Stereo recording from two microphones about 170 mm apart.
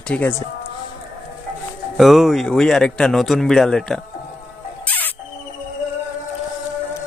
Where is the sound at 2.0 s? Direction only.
Centre (ahead or behind).